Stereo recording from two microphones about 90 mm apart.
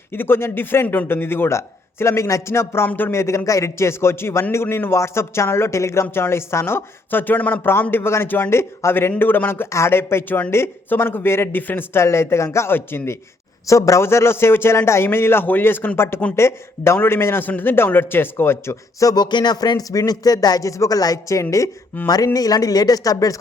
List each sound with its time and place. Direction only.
0.1 s speech: 25° left (ahead or behind)
13.7 s speech: 35° left (ahead or behind)